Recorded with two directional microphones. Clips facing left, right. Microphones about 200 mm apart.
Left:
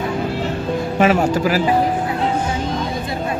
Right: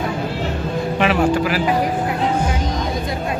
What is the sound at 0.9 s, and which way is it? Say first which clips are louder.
Speech: left 1 dB; 40° left (ahead or behind).